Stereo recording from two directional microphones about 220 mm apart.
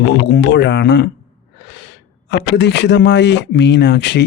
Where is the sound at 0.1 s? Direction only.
50° left (ahead or behind).